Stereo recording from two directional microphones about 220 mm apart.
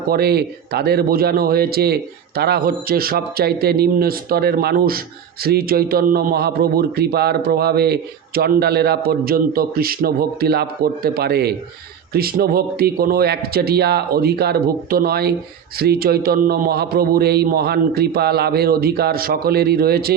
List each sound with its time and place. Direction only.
0.1 s a man's voice: 45° right (ahead or behind)